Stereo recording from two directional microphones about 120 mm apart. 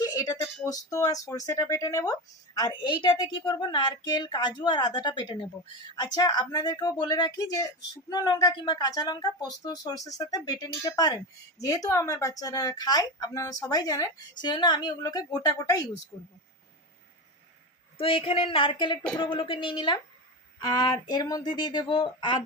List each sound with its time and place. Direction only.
0.0 s speech: 30° left (ahead or behind)
2.6 s a woman's voice: 40° left (ahead or behind)
17.9 s a woman's voice: 50° left (ahead or behind)